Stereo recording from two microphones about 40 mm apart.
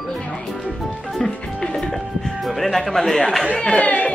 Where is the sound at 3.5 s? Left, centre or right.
Left.